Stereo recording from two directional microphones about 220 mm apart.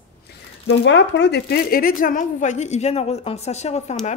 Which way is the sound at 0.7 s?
55° left (ahead or behind).